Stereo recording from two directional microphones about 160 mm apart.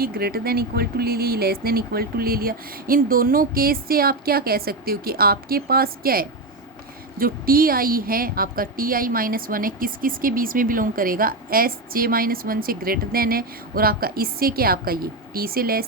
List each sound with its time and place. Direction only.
0.0 s a woman's voice: 70° right (ahead or behind)